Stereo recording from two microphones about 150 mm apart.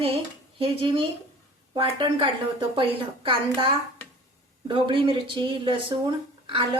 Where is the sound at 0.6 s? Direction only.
35° right (ahead or behind).